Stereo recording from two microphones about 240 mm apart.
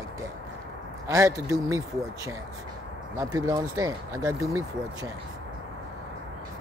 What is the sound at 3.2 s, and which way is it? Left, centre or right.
Speech, centre.